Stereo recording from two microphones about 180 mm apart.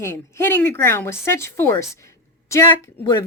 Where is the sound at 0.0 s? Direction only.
15° left (ahead or behind).